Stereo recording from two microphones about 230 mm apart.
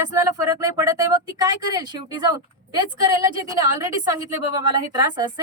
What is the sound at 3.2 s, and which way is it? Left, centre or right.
Speech, centre.